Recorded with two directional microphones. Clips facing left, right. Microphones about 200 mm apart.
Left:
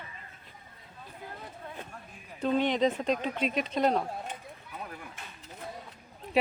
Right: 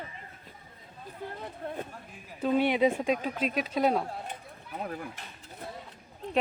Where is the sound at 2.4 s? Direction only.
10° right (ahead or behind).